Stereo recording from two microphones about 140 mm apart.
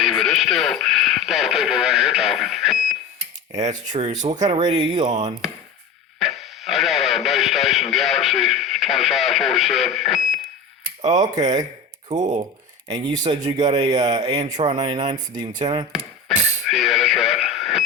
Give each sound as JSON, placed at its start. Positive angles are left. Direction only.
{"t": 0.0, "sound": "speech", "side_deg": 0}
{"t": 3.5, "sound": "speech", "side_deg": -55}
{"t": 4.5, "sound": "speech", "side_deg": -30}
{"t": 4.9, "sound": "speech", "side_deg": -55}
{"t": 6.1, "sound": "speech", "side_deg": 0}
{"t": 11.3, "sound": "speech", "side_deg": -30}
{"t": 12.2, "sound": "speech", "side_deg": -55}
{"t": 12.9, "sound": "speech", "side_deg": -30}
{"t": 16.6, "sound": "radio", "side_deg": 0}